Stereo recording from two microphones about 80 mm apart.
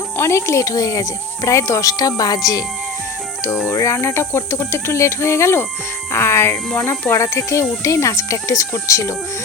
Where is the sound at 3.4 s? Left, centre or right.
Left.